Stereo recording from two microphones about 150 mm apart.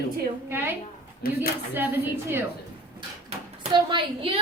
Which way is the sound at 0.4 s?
15° right (ahead or behind).